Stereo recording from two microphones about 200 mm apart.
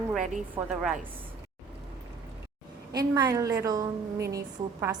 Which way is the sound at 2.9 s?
20° right (ahead or behind).